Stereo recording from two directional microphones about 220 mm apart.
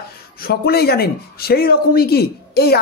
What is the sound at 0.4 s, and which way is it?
Speech, 45° left (ahead or behind).